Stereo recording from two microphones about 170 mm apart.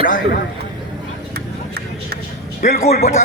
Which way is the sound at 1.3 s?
70° right (ahead or behind).